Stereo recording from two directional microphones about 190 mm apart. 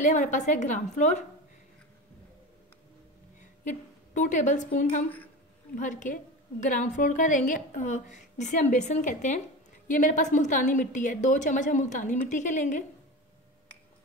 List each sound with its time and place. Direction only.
0.0 s a woman's voice: 40° left (ahead or behind)
3.3 s a woman's voice: 40° left (ahead or behind)